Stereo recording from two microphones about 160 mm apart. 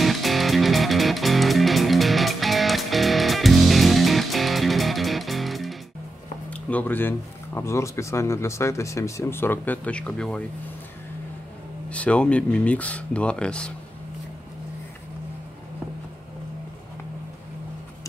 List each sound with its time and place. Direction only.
0.0 s music: centre (ahead or behind)
6.5 s speech: 10° left (ahead or behind)
11.9 s speech: 10° left (ahead or behind)